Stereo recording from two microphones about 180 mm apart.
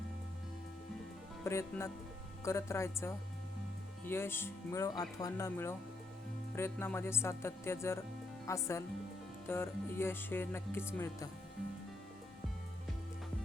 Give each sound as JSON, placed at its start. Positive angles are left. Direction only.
{"t": 1.5, "sound": "speech", "side_deg": 15}